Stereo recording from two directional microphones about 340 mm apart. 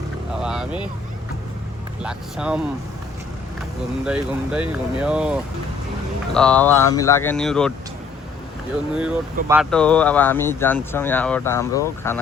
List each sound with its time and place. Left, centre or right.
0.4 s vehicle: centre
2.0 s speech: centre
4.0 s speech: centre
9.0 s speech: centre